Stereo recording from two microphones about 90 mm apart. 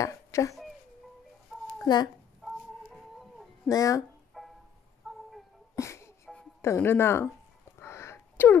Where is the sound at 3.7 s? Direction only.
40° left (ahead or behind).